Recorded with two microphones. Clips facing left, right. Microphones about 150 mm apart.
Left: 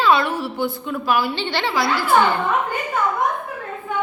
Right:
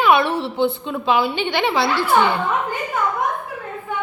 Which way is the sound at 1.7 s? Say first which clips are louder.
Right 2 dB; 25° right (ahead or behind).